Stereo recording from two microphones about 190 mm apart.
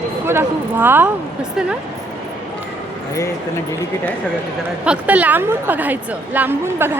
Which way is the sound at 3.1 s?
15° left (ahead or behind).